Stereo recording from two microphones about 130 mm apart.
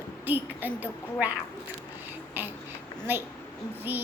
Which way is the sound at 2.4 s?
15° right (ahead or behind).